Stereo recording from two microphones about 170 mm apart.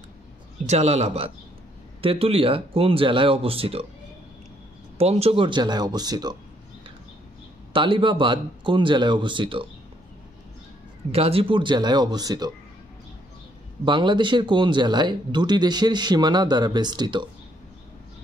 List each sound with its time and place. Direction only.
0.7 s speech: 40° right (ahead or behind)
4.9 s speech: 35° right (ahead or behind)
7.7 s speech: 30° right (ahead or behind)
11.1 s speech: 35° right (ahead or behind)
13.8 s speech: 30° right (ahead or behind)